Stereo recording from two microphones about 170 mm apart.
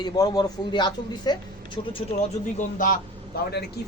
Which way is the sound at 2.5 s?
55° left (ahead or behind).